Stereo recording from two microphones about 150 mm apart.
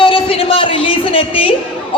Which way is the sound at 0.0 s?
35° left (ahead or behind).